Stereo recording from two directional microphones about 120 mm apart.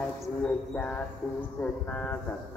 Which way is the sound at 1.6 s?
15° left (ahead or behind).